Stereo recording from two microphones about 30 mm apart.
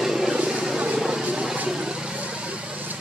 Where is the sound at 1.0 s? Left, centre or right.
Right.